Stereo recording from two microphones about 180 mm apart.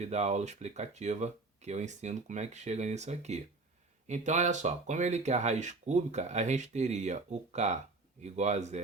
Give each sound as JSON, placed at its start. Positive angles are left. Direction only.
{"t": 0.0, "sound": "speech", "side_deg": -35}